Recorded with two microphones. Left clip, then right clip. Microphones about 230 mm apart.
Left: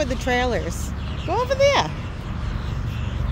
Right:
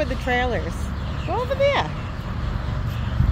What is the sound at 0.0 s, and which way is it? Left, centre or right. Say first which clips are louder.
Speech: left 1 dB; left.